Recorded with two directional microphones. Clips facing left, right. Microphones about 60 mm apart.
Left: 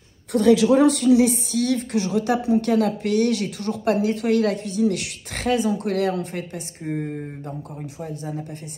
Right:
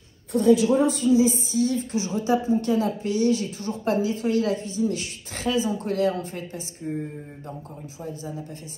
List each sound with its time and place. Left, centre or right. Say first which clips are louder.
0.3 s a woman's voice: left 2 dB; left